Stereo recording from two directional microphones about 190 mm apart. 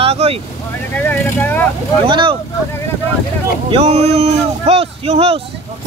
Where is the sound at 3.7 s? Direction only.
30° right (ahead or behind).